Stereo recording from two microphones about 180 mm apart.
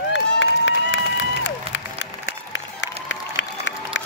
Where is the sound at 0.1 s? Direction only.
90° left.